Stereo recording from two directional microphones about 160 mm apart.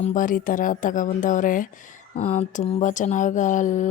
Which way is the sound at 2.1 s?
45° left (ahead or behind).